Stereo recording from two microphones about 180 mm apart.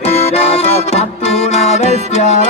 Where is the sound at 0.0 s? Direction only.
35° left (ahead or behind).